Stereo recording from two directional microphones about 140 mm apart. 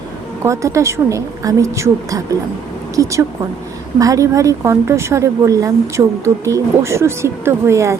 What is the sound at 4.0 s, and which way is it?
A woman's voice, 25° right (ahead or behind).